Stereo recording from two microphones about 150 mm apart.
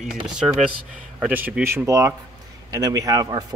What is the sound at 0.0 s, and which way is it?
Speech, 5° right (ahead or behind).